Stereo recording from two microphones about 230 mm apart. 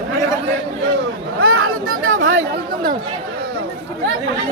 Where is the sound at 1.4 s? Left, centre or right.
Right.